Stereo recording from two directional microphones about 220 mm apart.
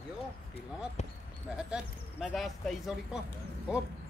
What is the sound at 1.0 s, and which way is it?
Speech, 30° left (ahead or behind).